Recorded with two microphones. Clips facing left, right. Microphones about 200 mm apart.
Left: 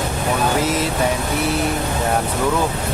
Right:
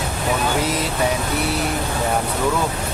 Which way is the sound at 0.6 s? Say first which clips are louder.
Left 2 dB; centre (ahead or behind).